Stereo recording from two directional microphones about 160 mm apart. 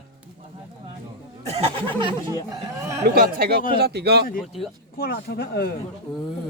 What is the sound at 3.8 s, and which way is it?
Speech, 90° right.